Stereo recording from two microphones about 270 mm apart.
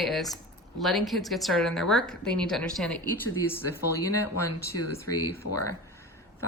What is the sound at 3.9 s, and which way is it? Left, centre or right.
Speech, left.